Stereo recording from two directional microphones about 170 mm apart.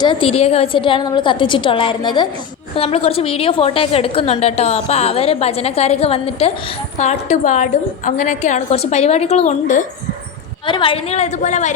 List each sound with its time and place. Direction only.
0.0 s a woman's voice: 30° left (ahead or behind); by 9.8 s 45° left (ahead or behind)
10.7 s a woman's voice: 30° left (ahead or behind)